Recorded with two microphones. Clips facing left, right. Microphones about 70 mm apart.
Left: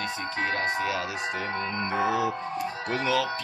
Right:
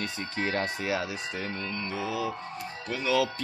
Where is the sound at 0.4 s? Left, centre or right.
Left.